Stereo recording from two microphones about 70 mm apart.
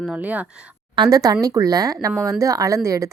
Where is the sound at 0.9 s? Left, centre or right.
Right.